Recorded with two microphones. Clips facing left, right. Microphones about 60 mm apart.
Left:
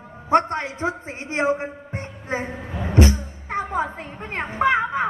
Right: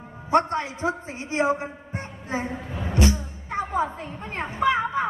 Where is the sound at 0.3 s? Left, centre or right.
Left.